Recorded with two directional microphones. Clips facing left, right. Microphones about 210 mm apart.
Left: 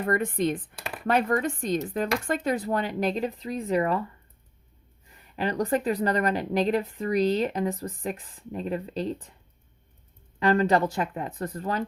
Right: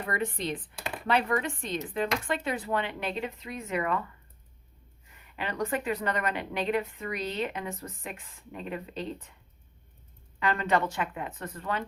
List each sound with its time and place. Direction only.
0.0 s speech: 50° left (ahead or behind)
5.1 s speech: 35° left (ahead or behind)
10.4 s speech: 35° left (ahead or behind)